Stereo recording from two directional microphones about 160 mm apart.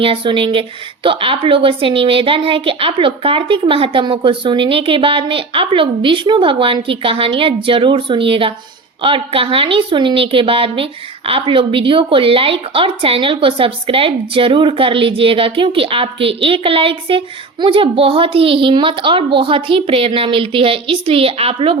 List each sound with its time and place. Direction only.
0.0 s speech: 35° right (ahead or behind)